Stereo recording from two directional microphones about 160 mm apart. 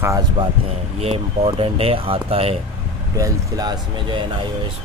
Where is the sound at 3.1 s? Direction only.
20° right (ahead or behind).